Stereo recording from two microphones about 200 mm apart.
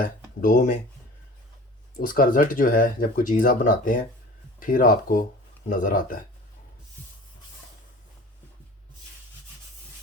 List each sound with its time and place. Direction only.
0.0 s speech: 40° left (ahead or behind)
2.0 s speech: 45° left (ahead or behind)